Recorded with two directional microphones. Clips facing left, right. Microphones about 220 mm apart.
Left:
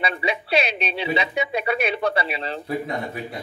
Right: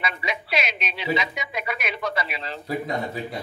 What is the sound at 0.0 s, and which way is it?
Speech, 30° left (ahead or behind).